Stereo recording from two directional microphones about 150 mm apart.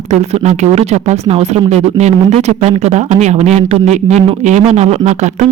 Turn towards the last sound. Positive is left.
turn(degrees=-50)  # may be behind; listen again after turning